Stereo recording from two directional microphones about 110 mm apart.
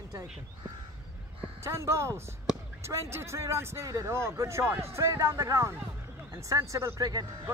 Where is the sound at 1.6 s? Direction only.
25° right (ahead or behind).